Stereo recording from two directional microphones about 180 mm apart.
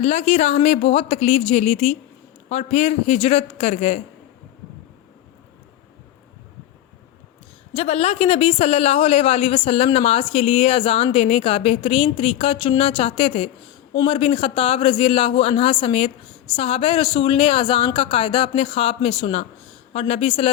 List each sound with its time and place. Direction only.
0.0 s speech: 35° left (ahead or behind)
7.7 s speech: 35° left (ahead or behind)